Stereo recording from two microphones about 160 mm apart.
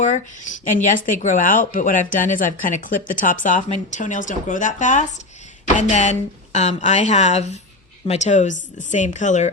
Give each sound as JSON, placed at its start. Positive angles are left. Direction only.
{"t": 0.0, "sound": "speech", "side_deg": 50}